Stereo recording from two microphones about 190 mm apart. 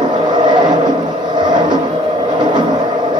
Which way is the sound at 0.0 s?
25° right (ahead or behind).